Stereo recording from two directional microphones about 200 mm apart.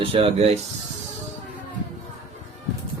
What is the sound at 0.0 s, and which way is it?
Speech, 30° right (ahead or behind).